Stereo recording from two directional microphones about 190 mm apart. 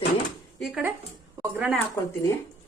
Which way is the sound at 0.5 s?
Centre (ahead or behind).